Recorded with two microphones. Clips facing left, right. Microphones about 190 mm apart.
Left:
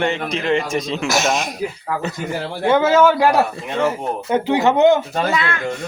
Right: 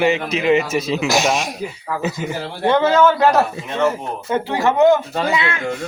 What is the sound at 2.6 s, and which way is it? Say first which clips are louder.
A man's voice: even; 5° left (ahead or behind).